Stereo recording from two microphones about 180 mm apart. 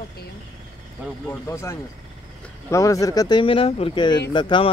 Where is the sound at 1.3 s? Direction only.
15° left (ahead or behind).